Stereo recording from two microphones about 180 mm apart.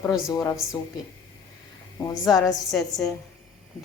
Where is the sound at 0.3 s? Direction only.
15° left (ahead or behind).